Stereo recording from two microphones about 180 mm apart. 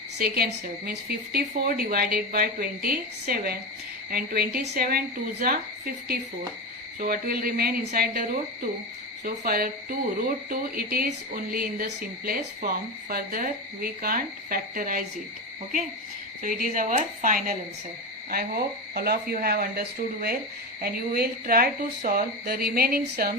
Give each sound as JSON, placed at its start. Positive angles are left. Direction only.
{"t": 0.2, "sound": "a woman's voice", "side_deg": -60}
{"t": 16.4, "sound": "speech", "side_deg": -45}
{"t": 18.3, "sound": "a woman's voice", "side_deg": -55}
{"t": 20.8, "sound": "a woman's voice", "side_deg": -55}